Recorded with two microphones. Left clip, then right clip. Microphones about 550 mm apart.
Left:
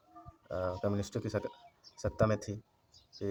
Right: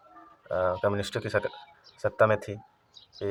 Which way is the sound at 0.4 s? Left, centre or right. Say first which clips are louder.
Right 9 dB; left.